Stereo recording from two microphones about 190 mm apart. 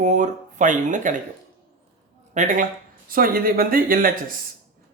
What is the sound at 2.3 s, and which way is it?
Speech, 40° right (ahead or behind).